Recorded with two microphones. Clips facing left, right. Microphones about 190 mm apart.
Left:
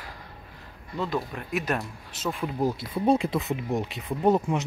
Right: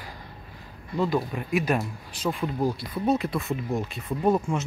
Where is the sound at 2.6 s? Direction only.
20° left (ahead or behind).